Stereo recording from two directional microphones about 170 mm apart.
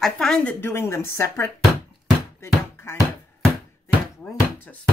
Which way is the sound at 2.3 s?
15° left (ahead or behind).